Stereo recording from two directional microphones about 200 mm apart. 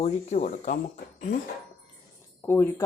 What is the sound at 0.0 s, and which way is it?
Speech, 35° left (ahead or behind).